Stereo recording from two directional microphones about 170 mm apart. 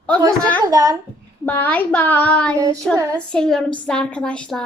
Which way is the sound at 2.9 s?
20° right (ahead or behind).